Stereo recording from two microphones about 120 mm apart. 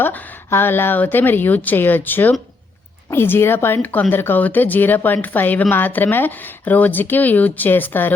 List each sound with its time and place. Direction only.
0.0 s a woman's voice: 15° left (ahead or behind)